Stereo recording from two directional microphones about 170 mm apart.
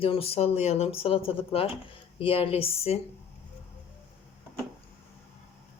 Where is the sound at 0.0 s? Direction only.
35° left (ahead or behind).